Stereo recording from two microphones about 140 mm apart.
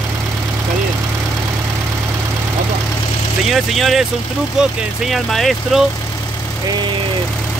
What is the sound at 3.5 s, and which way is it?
Speech, centre (ahead or behind).